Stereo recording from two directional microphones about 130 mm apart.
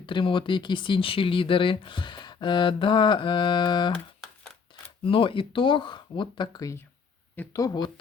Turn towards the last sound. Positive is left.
turn(degrees=30)  # may be behind; listen again after turning